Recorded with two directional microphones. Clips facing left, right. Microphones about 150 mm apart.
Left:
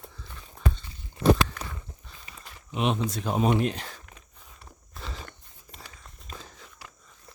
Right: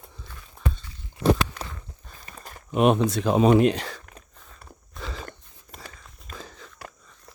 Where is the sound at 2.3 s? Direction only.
45° right (ahead or behind).